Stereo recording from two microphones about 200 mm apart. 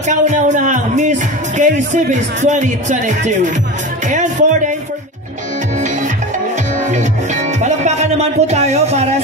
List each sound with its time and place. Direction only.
0.0 s speech: 35° right (ahead or behind)
4.1 s music: 40° right (ahead or behind)
6.9 s speech: 35° right (ahead or behind)